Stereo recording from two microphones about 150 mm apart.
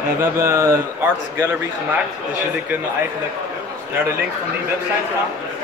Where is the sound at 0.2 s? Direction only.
15° right (ahead or behind).